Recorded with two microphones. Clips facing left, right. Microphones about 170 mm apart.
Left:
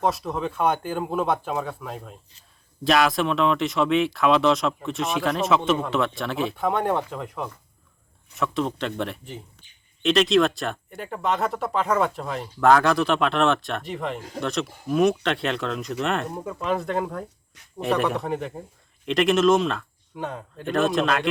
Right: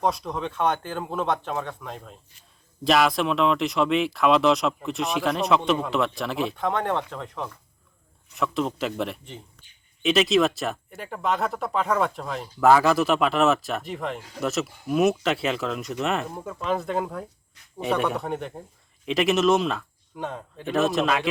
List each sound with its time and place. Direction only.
0.0 s speech: 5° left (ahead or behind)